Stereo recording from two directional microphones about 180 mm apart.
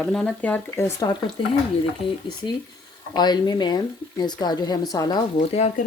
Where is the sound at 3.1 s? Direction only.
25° left (ahead or behind).